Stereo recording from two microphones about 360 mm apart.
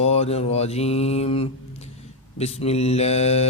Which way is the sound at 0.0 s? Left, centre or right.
Centre.